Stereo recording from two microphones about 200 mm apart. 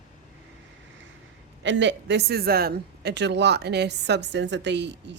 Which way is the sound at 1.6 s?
65° right (ahead or behind).